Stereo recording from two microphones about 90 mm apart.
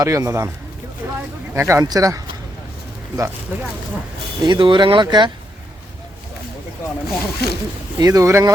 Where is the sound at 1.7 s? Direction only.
40° right (ahead or behind).